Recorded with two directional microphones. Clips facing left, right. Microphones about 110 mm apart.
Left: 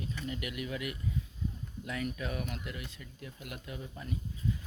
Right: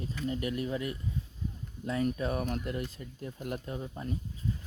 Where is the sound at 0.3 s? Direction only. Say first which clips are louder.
Right 7 dB; 35° right (ahead or behind).